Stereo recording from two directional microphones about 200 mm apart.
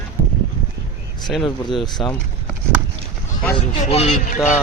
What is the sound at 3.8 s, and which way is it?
Speech, 35° left (ahead or behind).